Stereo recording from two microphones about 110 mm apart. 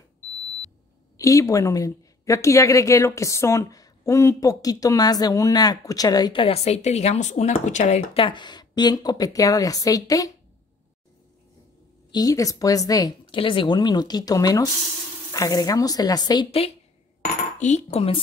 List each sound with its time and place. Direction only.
1.1 s a woman's voice: 30° left (ahead or behind)
6.3 s speech: 60° left (ahead or behind); by 10.3 s 30° left (ahead or behind)
12.1 s a woman's voice: 35° left (ahead or behind)
13.3 s a woman's voice: 50° left (ahead or behind)
17.2 s dishes: 90° left; by 18.2 s 65° left (ahead or behind)